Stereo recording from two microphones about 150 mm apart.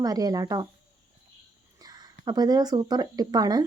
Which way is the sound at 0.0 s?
25° right (ahead or behind).